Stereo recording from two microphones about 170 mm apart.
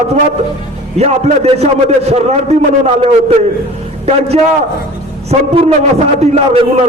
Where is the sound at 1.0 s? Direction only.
40° right (ahead or behind).